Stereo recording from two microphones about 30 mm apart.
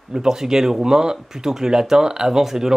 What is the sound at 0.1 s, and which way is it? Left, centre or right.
Speech, right.